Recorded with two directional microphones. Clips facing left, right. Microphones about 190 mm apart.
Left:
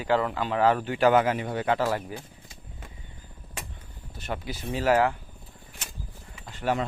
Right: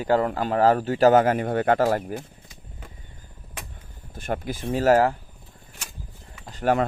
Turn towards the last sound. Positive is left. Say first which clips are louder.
# right 5 dB
turn(degrees=-40)  # may be behind; listen again after turning